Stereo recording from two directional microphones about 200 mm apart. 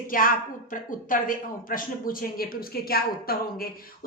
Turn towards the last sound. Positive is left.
turn(degrees=50)  # may be behind; listen again after turning